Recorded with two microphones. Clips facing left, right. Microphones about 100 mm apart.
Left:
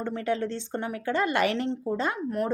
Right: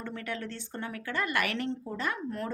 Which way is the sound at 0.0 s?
25° left (ahead or behind).